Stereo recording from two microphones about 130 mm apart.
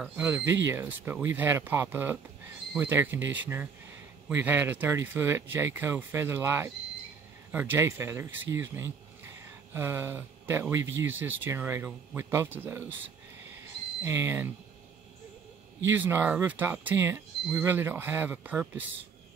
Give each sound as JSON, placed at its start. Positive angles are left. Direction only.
{"t": 0.0, "sound": "speech", "side_deg": -15}
{"t": 14.0, "sound": "speech", "side_deg": -20}
{"t": 15.9, "sound": "speech", "side_deg": -15}